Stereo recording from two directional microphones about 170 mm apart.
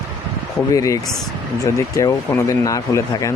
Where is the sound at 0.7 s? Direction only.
20° left (ahead or behind).